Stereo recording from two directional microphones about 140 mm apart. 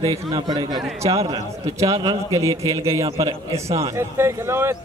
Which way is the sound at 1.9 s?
40° right (ahead or behind).